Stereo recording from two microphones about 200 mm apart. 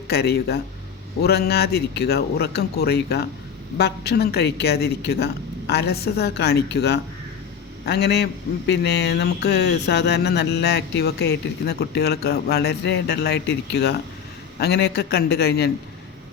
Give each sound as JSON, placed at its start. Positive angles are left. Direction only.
{"t": 0.1, "sound": "a man's voice", "side_deg": 55}